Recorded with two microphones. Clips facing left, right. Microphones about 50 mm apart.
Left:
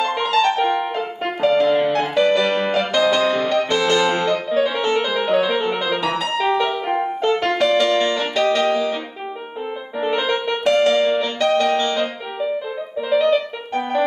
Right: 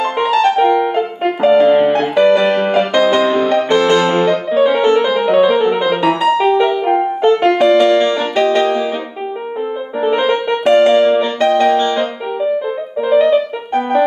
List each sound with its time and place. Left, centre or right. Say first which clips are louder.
0.0 s music: right 5 dB; right
9.9 s music: right 6 dB; right